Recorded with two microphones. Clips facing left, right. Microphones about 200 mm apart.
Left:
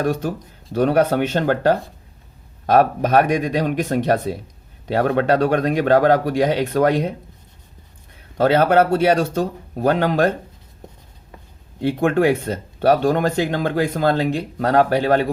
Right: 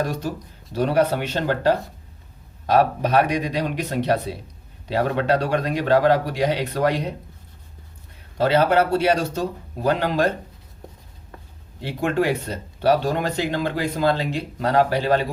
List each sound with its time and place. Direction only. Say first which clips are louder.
0.0 s speech: left 4 dB; 50° left (ahead or behind)
8.4 s speech: left 3 dB; 50° left (ahead or behind)
11.8 s speech: left 5 dB; 55° left (ahead or behind)